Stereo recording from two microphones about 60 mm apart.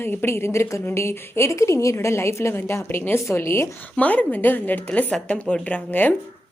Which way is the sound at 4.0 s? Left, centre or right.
Left.